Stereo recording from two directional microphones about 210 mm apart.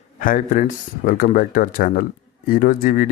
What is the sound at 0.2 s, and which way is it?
Speech, 40° left (ahead or behind).